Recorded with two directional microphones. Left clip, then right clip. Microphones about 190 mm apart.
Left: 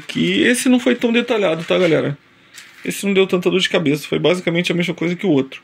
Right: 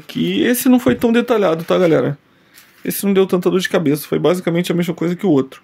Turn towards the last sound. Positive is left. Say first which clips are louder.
# right 1 dB
turn(degrees=-25)  # may be behind; listen again after turning